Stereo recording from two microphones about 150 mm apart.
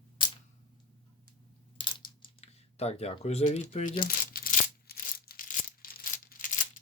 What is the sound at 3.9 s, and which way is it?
Tearing, 80° left.